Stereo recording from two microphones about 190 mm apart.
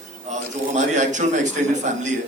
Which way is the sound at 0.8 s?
40° right (ahead or behind).